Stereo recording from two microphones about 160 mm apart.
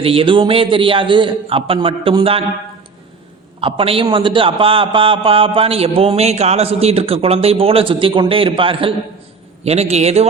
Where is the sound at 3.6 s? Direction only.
35° right (ahead or behind).